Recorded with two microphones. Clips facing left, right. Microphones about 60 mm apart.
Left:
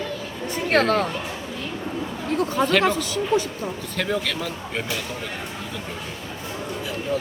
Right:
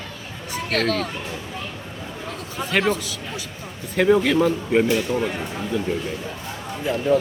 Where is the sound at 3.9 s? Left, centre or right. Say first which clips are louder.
Right 10 dB; centre.